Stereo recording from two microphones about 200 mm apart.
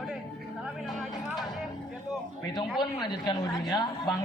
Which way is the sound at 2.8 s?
20° left (ahead or behind).